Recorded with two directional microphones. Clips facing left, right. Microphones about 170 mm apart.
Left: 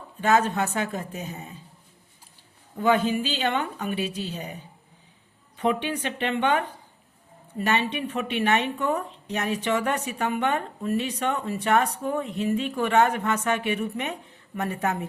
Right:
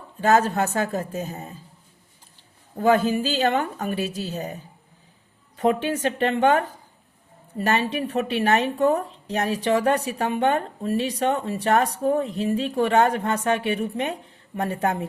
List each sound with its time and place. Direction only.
0.2 s speech: 40° right (ahead or behind)
2.7 s speech: 45° right (ahead or behind)
5.5 s speech: 40° right (ahead or behind)